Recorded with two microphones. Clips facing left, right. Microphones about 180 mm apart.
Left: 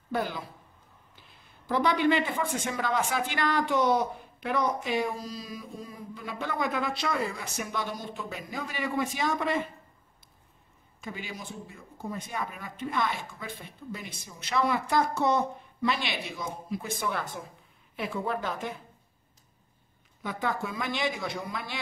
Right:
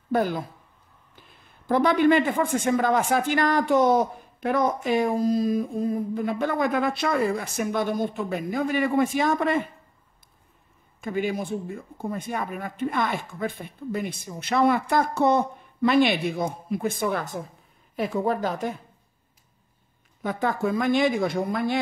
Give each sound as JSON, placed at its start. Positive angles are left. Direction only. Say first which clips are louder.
{"t": 0.1, "sound": "speech", "louder": "right 7 dB", "side_deg": -45}
{"t": 1.7, "sound": "speech", "louder": "right 6 dB", "side_deg": -50}
{"t": 11.0, "sound": "a woman's voice", "louder": "right 13 dB", "side_deg": -55}
{"t": 20.2, "sound": "speech", "louder": "right 6 dB", "side_deg": -50}